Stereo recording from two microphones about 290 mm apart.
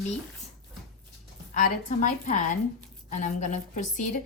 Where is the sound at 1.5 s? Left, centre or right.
Left.